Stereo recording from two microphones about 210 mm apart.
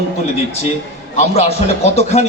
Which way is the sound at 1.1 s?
30° left (ahead or behind).